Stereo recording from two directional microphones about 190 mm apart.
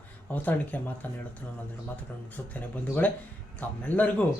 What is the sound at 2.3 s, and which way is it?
Speech, 10° left (ahead or behind).